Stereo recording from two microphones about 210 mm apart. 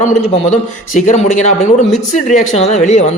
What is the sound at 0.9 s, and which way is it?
Speech, 35° left (ahead or behind).